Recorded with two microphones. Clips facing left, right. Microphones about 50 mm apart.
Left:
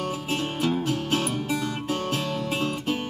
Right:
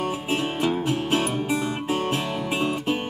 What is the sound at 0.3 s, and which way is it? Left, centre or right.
Music, right.